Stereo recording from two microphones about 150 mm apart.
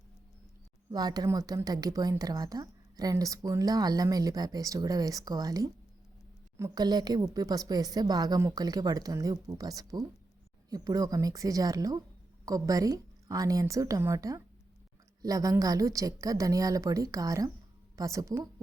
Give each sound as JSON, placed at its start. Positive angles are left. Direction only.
{"t": 0.9, "sound": "a woman's voice", "side_deg": -25}